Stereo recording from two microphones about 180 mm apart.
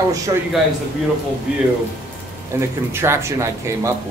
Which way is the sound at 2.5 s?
15° right (ahead or behind).